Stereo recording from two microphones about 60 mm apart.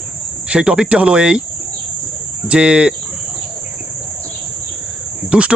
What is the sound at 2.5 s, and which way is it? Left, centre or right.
Speech, centre.